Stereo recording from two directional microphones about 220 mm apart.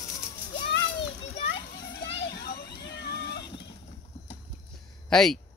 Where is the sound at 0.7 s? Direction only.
50° left (ahead or behind).